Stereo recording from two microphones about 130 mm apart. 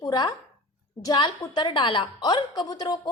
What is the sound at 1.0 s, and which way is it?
A woman's voice, 30° left (ahead or behind).